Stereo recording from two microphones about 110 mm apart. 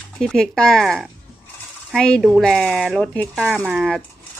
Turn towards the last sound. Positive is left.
turn(degrees=-5)  # may be behind; listen again after turning